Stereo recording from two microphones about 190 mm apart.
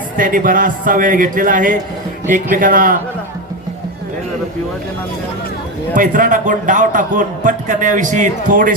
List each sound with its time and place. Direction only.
0.2 s a man's voice: 45° right (ahead or behind)
5.9 s a man's voice: 45° right (ahead or behind)